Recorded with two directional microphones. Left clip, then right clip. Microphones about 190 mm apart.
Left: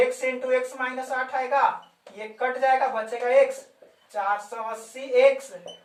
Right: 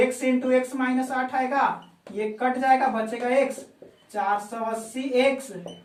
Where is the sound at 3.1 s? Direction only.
Centre (ahead or behind).